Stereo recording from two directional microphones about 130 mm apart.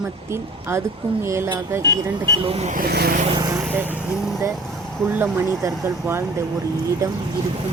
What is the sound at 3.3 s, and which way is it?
Vehicle, 30° right (ahead or behind).